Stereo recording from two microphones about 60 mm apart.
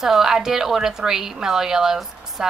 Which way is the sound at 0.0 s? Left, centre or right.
Centre.